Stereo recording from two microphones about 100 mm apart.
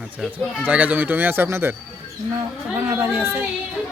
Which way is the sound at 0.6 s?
15° right (ahead or behind).